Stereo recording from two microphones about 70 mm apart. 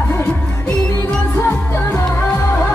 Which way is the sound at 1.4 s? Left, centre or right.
Left.